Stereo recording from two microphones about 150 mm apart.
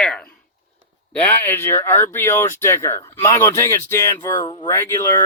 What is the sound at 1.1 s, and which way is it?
Speech, 15° left (ahead or behind).